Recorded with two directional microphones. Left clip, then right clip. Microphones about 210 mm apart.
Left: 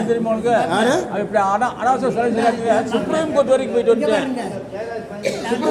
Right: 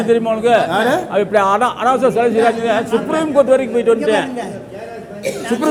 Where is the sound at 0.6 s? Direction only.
25° right (ahead or behind).